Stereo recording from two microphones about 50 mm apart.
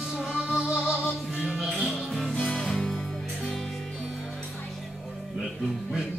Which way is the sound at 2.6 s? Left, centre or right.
Centre.